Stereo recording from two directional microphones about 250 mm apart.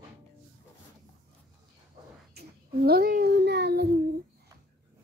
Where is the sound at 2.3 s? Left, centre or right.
Right.